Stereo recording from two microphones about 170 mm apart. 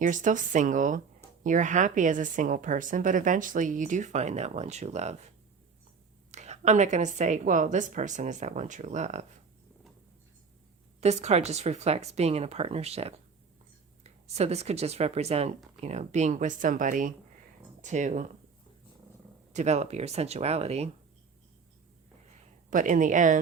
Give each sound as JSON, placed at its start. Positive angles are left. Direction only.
{"t": 0.0, "sound": "a woman's voice", "side_deg": -50}
{"t": 6.3, "sound": "a woman's voice", "side_deg": -40}
{"t": 11.0, "sound": "a woman's voice", "side_deg": -40}
{"t": 19.5, "sound": "speech", "side_deg": -40}
{"t": 22.7, "sound": "a woman's voice", "side_deg": -50}